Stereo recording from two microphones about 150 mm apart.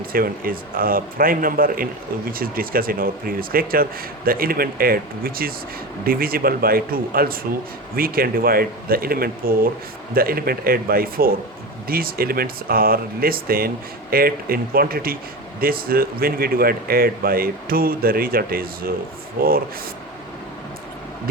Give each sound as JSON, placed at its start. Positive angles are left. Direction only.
{"t": 0.1, "sound": "a man's voice", "side_deg": -75}